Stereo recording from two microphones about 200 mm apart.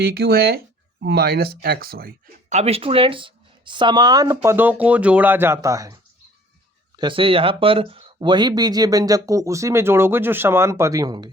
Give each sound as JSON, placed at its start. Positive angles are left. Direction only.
{"t": 0.0, "sound": "speech", "side_deg": -50}
{"t": 2.5, "sound": "speech", "side_deg": -30}